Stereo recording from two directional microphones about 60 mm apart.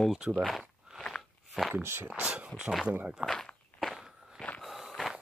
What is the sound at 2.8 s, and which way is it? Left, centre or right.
Speech, right.